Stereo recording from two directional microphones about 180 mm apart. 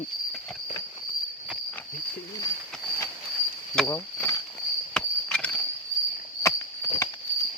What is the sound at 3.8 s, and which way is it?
Speech, 20° left (ahead or behind).